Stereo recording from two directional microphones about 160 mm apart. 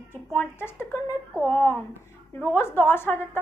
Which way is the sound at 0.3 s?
10° left (ahead or behind).